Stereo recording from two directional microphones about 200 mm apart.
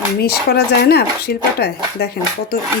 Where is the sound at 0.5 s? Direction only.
50° left (ahead or behind).